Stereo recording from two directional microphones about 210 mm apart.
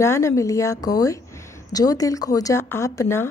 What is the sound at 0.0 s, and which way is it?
Speech, 15° left (ahead or behind).